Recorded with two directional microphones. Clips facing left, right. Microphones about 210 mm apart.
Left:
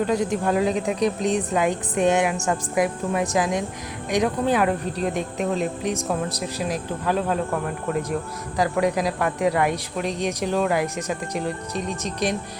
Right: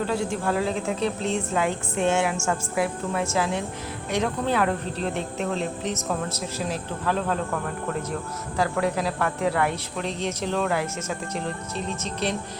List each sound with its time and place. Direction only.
0.1 s speech: 20° left (ahead or behind)
8.5 s speech: 15° left (ahead or behind)